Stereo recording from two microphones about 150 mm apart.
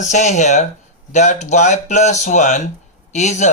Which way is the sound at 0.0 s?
50° left (ahead or behind).